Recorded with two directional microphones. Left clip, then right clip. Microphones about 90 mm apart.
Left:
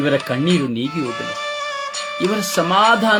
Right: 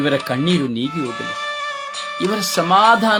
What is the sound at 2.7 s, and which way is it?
Speech, 65° right (ahead or behind).